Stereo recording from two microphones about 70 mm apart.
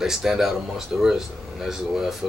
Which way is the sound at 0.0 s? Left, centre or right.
Centre.